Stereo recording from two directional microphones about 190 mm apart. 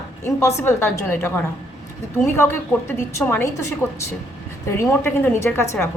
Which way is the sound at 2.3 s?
10° left (ahead or behind).